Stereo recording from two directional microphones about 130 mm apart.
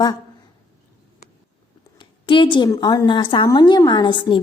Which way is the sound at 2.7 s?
25° left (ahead or behind).